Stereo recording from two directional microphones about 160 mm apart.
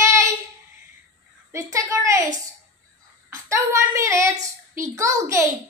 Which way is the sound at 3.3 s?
20° right (ahead or behind).